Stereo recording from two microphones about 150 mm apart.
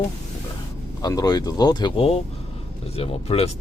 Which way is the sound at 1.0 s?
25° left (ahead or behind).